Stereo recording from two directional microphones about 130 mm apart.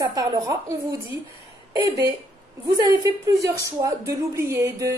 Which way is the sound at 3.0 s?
25° right (ahead or behind).